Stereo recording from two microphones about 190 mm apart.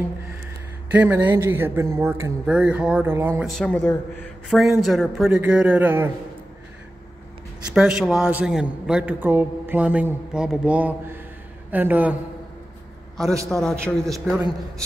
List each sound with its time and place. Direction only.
0.9 s a man's voice: 10° right (ahead or behind)
3.4 s a man's voice: 5° left (ahead or behind)
4.5 s speech: centre (ahead or behind)
7.7 s a man's voice: 5° right (ahead or behind)
13.2 s a man's voice: 15° right (ahead or behind)
13.5 s speech: centre (ahead or behind)